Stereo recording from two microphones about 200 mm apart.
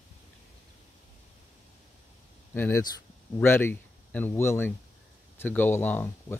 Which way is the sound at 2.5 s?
10° left (ahead or behind).